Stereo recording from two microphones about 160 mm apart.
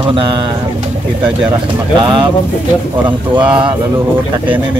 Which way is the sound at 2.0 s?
30° right (ahead or behind).